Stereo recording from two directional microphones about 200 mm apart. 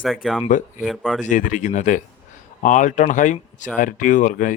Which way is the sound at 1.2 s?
40° left (ahead or behind).